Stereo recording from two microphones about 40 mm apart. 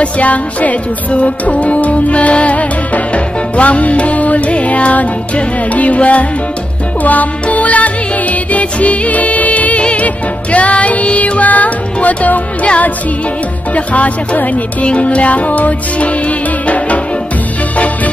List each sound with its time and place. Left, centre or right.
0.0 s music: left